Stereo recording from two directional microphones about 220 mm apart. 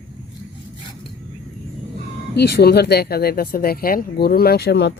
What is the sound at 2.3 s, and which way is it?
Speech, 45° left (ahead or behind).